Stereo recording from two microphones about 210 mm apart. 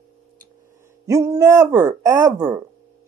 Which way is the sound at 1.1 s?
15° right (ahead or behind).